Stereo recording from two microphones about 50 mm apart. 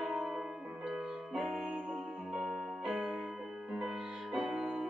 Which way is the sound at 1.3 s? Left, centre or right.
Centre.